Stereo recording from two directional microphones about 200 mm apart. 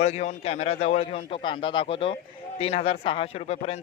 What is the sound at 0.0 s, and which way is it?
Speech, 35° left (ahead or behind).